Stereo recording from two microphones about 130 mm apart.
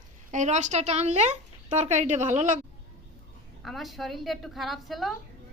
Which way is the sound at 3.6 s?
Centre (ahead or behind).